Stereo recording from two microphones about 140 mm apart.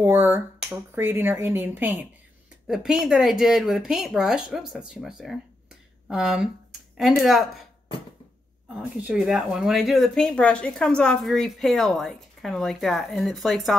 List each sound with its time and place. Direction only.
0.0 s speech: 15° right (ahead or behind)
2.6 s speech: 5° right (ahead or behind)
9.0 s speech: 5° right (ahead or behind)